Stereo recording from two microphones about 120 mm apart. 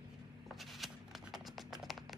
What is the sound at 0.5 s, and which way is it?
Music, centre (ahead or behind).